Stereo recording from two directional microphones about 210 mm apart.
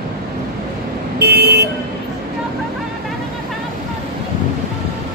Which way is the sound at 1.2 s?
50° right (ahead or behind).